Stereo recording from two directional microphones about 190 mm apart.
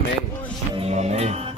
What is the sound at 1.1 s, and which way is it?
Music, 35° right (ahead or behind).